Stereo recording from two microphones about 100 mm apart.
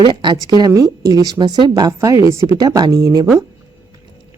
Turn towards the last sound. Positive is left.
turn(degrees=-35)  # may be behind; listen again after turning